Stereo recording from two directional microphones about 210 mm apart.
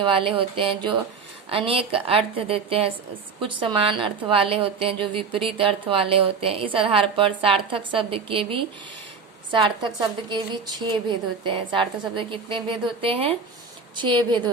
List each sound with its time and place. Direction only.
0.0 s a woman's voice: 25° right (ahead or behind)